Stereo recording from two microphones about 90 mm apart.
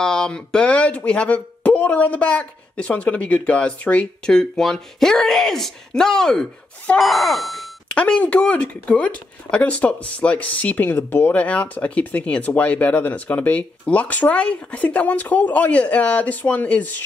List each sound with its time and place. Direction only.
0.0 s speech: 5° left (ahead or behind)
7.9 s speech: 15° left (ahead or behind)